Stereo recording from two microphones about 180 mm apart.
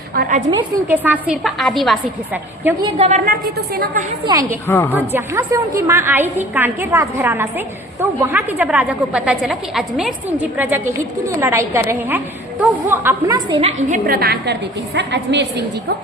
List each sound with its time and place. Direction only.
0.2 s a woman's voice: 45° right (ahead or behind)
0.9 s a woman's voice: 10° right (ahead or behind)
2.8 s a woman's voice: 35° right (ahead or behind)
4.3 s a woman's voice: 20° right (ahead or behind)
4.7 s a woman's voice: 10° left (ahead or behind)
4.9 s a woman's voice: 15° right (ahead or behind); by 14.0 s 30° right (ahead or behind)
14.1 s a woman's voice: 60° right (ahead or behind)